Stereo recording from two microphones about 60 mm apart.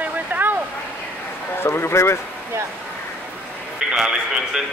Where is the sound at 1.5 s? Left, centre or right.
Left.